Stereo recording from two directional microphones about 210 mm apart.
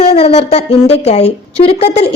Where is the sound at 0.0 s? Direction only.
30° left (ahead or behind).